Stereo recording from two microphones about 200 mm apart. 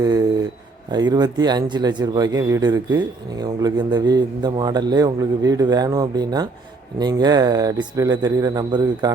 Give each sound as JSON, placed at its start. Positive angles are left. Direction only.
{"t": 0.9, "sound": "a man's voice", "side_deg": -20}